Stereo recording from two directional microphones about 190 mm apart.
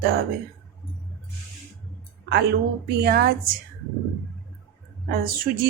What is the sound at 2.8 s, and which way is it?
Speech, 55° right (ahead or behind).